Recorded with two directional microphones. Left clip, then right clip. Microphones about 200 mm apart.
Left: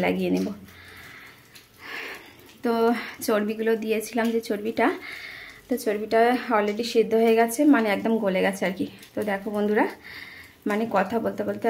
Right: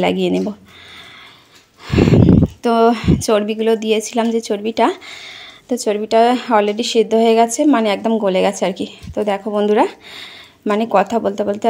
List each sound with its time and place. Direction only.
0.0 s speech: 30° right (ahead or behind)
1.9 s a sound: 35° right (ahead or behind)
2.6 s speech: 35° right (ahead or behind)